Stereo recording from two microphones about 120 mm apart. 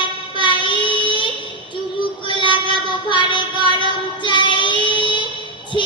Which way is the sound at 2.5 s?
40° left (ahead or behind).